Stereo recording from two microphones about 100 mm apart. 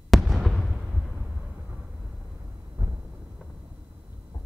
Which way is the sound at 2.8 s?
35° right (ahead or behind).